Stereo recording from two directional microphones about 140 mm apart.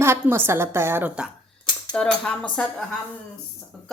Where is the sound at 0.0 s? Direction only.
15° right (ahead or behind).